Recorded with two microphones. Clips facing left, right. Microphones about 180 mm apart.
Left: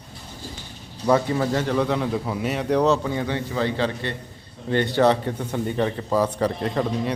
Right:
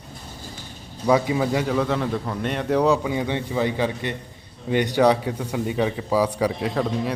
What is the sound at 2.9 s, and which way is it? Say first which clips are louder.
Speech: right 1 dB; 10° right (ahead or behind).